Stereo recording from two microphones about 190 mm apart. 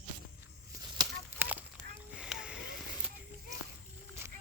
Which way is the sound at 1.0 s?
20° right (ahead or behind).